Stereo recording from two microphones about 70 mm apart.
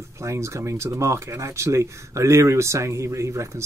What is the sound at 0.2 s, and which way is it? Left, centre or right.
Speech, right.